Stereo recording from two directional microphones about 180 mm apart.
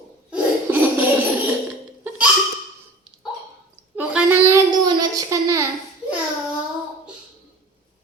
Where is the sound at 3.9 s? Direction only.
5° right (ahead or behind).